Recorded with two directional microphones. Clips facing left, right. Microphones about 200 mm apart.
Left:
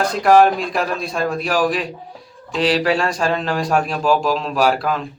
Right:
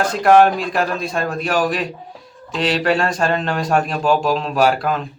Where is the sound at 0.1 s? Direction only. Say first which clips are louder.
Right 1 dB; centre (ahead or behind).